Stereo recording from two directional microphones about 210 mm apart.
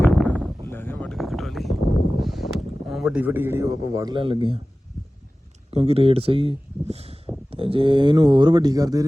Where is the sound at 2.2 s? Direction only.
Centre (ahead or behind); by 4.6 s 25° right (ahead or behind).